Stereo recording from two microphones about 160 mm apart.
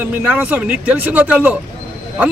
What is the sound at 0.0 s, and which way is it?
A man's voice, 10° right (ahead or behind).